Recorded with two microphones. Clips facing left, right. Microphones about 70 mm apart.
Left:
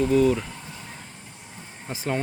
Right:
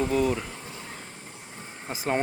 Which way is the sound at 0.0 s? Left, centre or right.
Centre.